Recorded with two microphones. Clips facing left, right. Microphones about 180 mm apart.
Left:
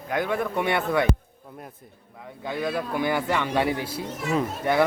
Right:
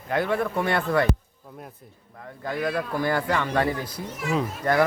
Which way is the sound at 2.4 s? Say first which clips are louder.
Right 1 dB; centre (ahead or behind).